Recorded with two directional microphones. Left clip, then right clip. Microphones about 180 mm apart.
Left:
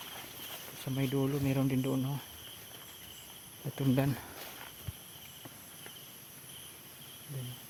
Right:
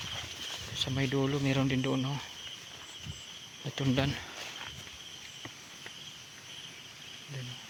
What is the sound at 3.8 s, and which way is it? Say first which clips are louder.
Speech: right 1 dB; 15° left (ahead or behind).